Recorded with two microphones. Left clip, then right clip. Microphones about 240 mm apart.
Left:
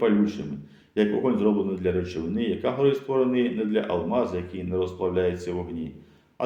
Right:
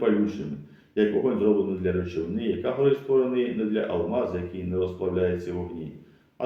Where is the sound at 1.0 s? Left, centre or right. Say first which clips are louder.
Even; left.